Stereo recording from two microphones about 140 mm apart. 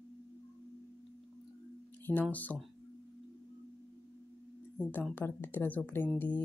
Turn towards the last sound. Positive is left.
turn(degrees=15)  # may be behind; listen again after turning